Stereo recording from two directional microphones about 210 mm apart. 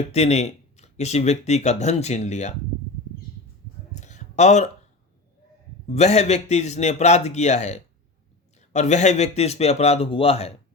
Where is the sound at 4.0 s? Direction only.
35° left (ahead or behind).